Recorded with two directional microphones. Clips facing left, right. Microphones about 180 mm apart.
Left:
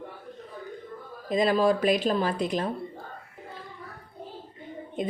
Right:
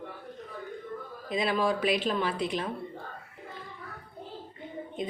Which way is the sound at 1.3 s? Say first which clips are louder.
Left 5 dB; 40° left (ahead or behind).